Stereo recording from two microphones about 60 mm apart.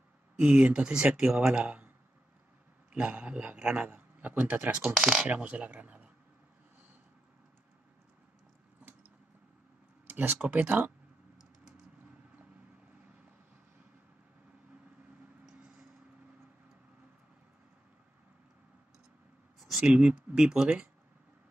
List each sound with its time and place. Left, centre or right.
0.4 s speech: right
2.9 s a man's voice: right
4.8 s speech: centre
10.0 s speech: right
19.9 s speech: centre